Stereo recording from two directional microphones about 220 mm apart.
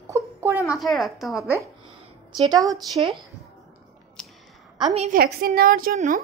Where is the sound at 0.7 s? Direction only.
Centre (ahead or behind).